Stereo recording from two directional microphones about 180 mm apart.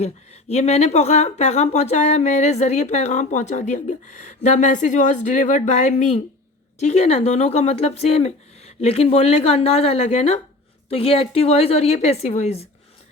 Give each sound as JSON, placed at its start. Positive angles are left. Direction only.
{"t": 0.0, "sound": "speech", "side_deg": 35}